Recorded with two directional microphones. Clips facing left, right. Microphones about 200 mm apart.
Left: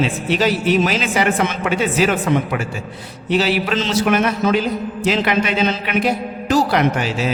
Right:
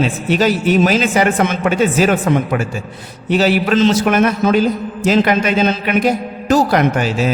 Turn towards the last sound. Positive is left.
turn(degrees=-45)  # may be behind; listen again after turning